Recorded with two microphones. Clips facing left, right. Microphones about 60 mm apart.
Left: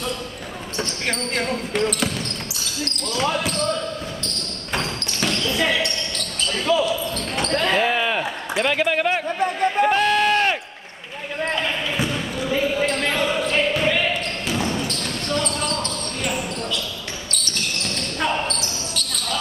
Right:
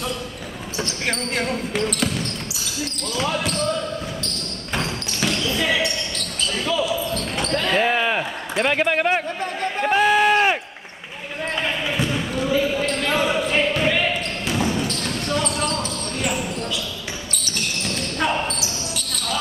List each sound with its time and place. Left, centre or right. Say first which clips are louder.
0.7 s speech: even; centre
4.7 s basketball bounce: even; centre
7.8 s basketball bounce: right 1 dB; centre
8.6 s speech: right 1 dB; centre
9.8 s a sound: right 5 dB; centre
11.4 s basketball bounce: even; centre
13.1 s basketball bounce: right 1 dB; centre